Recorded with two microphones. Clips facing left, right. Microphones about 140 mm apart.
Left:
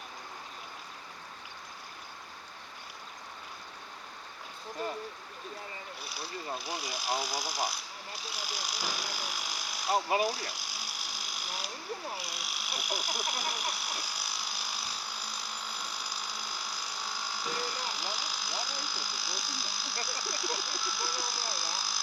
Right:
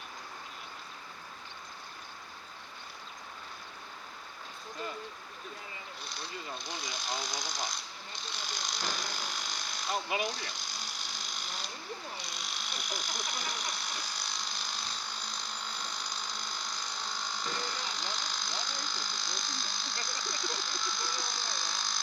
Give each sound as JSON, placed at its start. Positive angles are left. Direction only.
{"t": 6.0, "sound": "speech", "side_deg": 5}
{"t": 9.9, "sound": "speech", "side_deg": 35}
{"t": 10.2, "sound": "a sound", "side_deg": 5}
{"t": 12.1, "sound": "electric shaver", "side_deg": 5}